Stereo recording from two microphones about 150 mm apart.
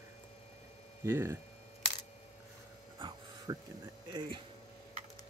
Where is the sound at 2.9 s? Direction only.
30° right (ahead or behind).